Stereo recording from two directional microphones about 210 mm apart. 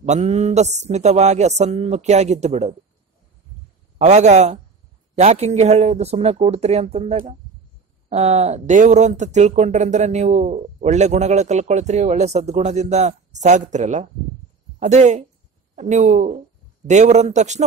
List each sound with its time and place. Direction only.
0.0 s speech: 35° right (ahead or behind)
4.0 s speech: 35° right (ahead or behind)